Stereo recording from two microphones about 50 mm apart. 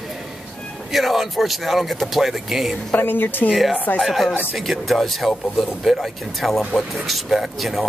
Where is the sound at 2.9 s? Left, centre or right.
Left.